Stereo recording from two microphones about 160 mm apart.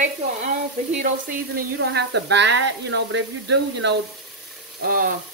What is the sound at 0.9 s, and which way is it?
A woman's voice, 55° right (ahead or behind).